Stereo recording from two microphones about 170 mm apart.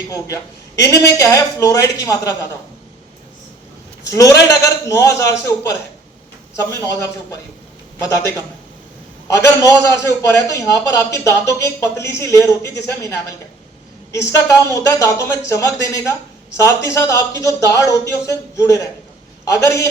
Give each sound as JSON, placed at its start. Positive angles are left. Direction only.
{"t": 0.9, "sound": "a man's voice", "side_deg": 20}
{"t": 4.1, "sound": "a man's voice", "side_deg": 20}
{"t": 6.6, "sound": "a man's voice", "side_deg": 20}
{"t": 9.2, "sound": "a man's voice", "side_deg": 20}